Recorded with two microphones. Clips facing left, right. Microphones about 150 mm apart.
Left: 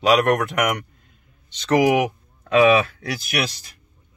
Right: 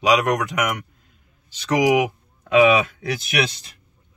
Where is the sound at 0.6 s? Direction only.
Centre (ahead or behind); by 2.8 s 15° right (ahead or behind).